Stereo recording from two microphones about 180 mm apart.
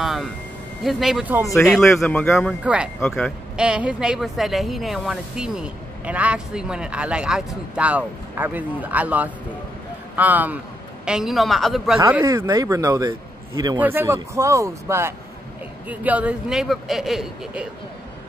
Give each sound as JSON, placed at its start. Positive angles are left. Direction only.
{"t": 0.0, "sound": "a sound", "side_deg": 0}
{"t": 0.8, "sound": "a woman's voice", "side_deg": 0}
{"t": 1.5, "sound": "a woman's voice", "side_deg": 0}
{"t": 2.6, "sound": "a woman's voice", "side_deg": -5}
{"t": 12.0, "sound": "a woman's voice", "side_deg": -15}